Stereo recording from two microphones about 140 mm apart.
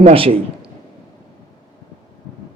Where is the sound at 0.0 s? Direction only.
45° right (ahead or behind).